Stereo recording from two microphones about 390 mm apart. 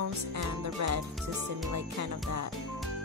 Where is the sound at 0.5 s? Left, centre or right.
Right.